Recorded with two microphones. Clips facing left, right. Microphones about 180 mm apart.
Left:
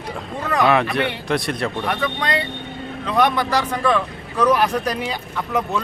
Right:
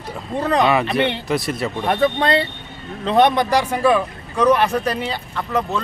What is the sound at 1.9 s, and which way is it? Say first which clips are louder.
Speech: right 10 dB; 30° right (ahead or behind).